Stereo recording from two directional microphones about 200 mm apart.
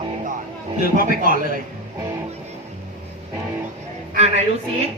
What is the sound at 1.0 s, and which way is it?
Speech, 45° right (ahead or behind).